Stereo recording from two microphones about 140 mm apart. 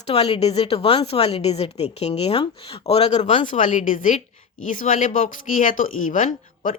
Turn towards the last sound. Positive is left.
turn(degrees=65)  # may be behind; listen again after turning